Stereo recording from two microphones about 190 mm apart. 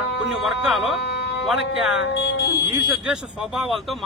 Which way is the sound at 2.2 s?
60° left (ahead or behind).